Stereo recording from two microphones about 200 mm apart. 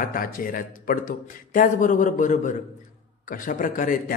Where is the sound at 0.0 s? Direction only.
45° left (ahead or behind).